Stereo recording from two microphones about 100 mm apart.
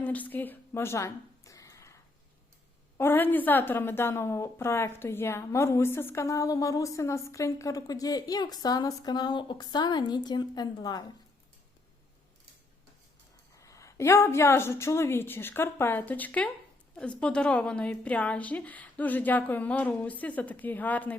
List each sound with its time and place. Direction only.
0.0 s a sound: 15° left (ahead or behind)
3.0 s a woman's voice: 20° left (ahead or behind); by 11.0 s 45° left (ahead or behind)
13.6 s a woman's voice: 30° left (ahead or behind); by 21.2 s 15° left (ahead or behind)